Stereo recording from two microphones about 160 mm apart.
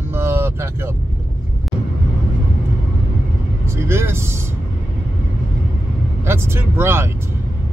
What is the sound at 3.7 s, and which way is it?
Speech, 15° right (ahead or behind).